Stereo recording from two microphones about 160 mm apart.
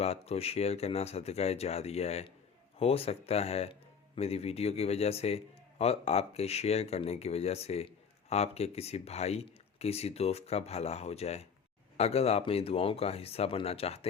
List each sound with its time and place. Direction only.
0.0 s speech: 40° left (ahead or behind)